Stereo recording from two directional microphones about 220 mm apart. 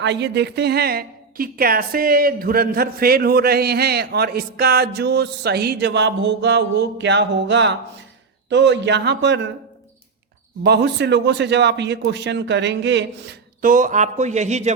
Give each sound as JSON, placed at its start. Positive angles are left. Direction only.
{"t": 0.0, "sound": "a woman's voice", "side_deg": -50}
{"t": 10.6, "sound": "a woman's voice", "side_deg": -50}
{"t": 13.7, "sound": "speech", "side_deg": -35}